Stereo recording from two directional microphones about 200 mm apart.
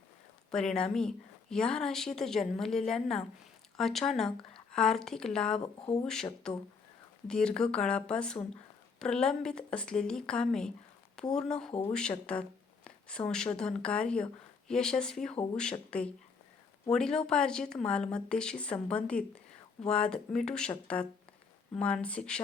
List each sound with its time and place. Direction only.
0.5 s speech: 5° left (ahead or behind)
5.6 s speech: 25° left (ahead or behind)
6.5 s speech: 5° left (ahead or behind)